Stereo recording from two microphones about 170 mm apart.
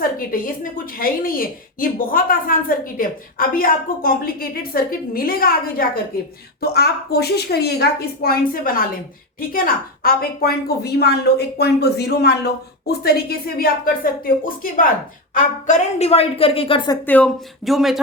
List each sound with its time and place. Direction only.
0.2 s a woman's voice: 55° left (ahead or behind)
6.6 s a woman's voice: 70° left (ahead or behind)
12.9 s a woman's voice: 65° left (ahead or behind); by 17.0 s 25° left (ahead or behind)
17.1 s speech: 5° left (ahead or behind)